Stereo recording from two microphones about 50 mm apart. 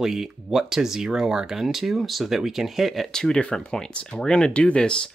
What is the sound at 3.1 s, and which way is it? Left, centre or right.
Speech, centre.